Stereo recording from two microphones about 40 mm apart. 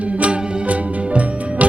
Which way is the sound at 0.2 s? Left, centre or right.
Right.